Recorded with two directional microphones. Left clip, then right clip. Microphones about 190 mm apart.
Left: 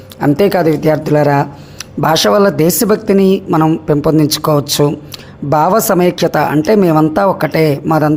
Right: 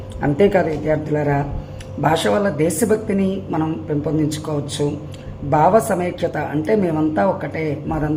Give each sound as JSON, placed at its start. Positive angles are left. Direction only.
{"t": 0.2, "sound": "a woman's voice", "side_deg": 35}